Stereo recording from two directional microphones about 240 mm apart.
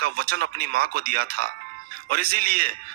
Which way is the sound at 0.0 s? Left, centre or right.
Right.